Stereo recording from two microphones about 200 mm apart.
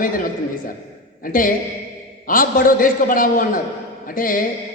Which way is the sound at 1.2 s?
45° left (ahead or behind).